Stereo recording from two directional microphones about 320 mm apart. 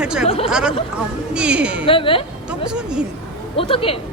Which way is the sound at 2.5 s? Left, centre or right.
Centre.